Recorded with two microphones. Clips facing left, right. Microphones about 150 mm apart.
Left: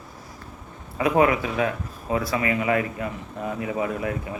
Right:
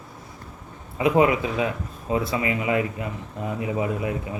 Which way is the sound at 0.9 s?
20° right (ahead or behind).